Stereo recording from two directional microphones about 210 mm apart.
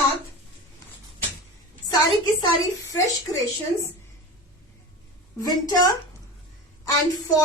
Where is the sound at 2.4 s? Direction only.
15° left (ahead or behind).